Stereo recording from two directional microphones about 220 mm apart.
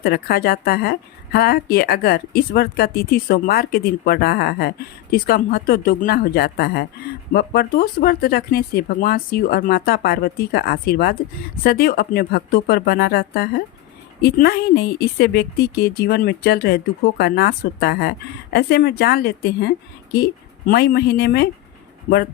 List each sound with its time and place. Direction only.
0.0 s speech: 45° left (ahead or behind)